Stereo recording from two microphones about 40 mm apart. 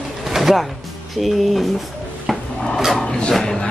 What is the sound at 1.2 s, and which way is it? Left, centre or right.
Speech, centre.